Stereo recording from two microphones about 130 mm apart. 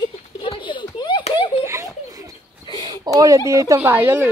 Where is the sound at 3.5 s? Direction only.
25° right (ahead or behind).